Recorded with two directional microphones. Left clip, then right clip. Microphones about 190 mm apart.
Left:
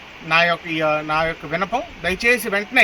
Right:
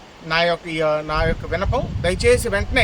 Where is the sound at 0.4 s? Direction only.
25° right (ahead or behind).